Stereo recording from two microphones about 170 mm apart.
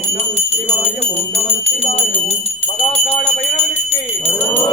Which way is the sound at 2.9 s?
40° left (ahead or behind).